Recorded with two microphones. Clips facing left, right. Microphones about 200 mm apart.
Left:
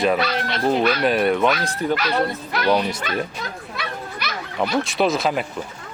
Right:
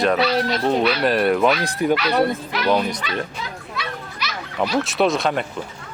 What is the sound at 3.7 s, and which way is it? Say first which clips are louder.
Children playing: even; 55° left (ahead or behind).